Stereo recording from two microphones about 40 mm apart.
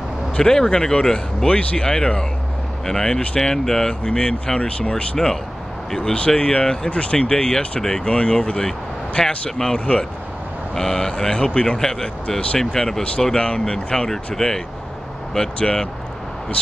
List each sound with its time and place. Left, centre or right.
0.4 s speech: centre
1.5 s speech: left
1.9 s speech: centre
5.1 s speech: centre
6.1 s speech: left
10.7 s speech: centre
11.3 s speech: left
11.8 s speech: centre
12.5 s speech: centre
13.4 s speech: left
15.6 s speech: centre